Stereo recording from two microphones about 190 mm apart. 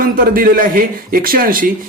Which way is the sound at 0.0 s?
50° right (ahead or behind).